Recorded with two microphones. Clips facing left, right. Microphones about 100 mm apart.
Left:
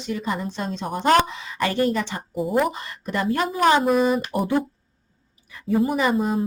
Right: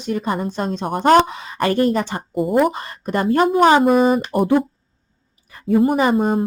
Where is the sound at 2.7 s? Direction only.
50° right (ahead or behind).